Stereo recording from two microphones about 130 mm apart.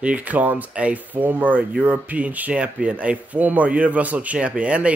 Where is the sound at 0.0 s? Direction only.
10° right (ahead or behind).